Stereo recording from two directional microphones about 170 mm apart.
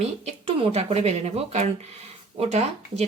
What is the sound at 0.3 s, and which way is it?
Speech, 30° right (ahead or behind).